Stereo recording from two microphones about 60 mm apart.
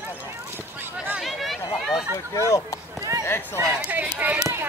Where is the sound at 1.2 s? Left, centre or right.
Centre.